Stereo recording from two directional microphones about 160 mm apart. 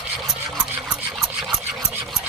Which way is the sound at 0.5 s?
5° right (ahead or behind).